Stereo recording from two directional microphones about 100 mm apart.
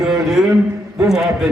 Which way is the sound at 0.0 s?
5° right (ahead or behind).